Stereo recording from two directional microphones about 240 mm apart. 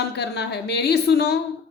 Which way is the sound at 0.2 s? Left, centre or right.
Left.